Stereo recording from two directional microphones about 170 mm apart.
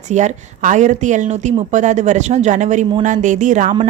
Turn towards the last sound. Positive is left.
turn(degrees=-45)  # may be behind; listen again after turning